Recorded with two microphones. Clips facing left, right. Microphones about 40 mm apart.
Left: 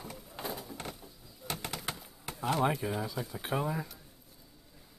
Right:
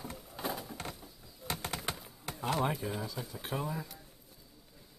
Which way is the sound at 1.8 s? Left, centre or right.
Centre.